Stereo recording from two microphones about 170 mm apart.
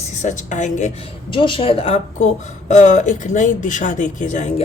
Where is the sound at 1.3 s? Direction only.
30° left (ahead or behind).